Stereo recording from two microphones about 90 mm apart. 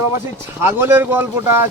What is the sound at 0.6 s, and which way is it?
Speech, 25° right (ahead or behind).